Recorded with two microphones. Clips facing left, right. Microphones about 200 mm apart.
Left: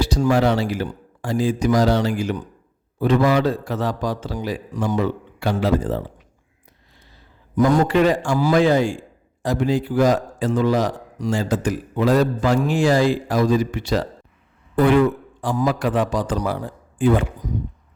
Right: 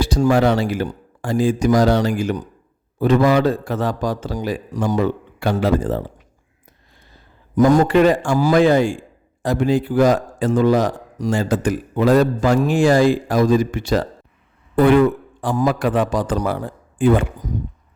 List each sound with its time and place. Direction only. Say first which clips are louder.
0.0 s a man's voice: right 2 dB; 50° right (ahead or behind)
7.1 s a man's voice: right 2 dB; 45° right (ahead or behind)
15.4 s a man's voice: right 2 dB; 55° right (ahead or behind)